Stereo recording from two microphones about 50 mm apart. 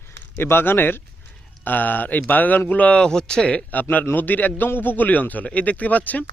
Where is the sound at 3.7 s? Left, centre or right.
Left.